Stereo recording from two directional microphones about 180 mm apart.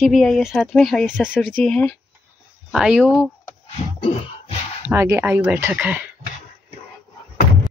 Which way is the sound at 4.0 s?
30° left (ahead or behind).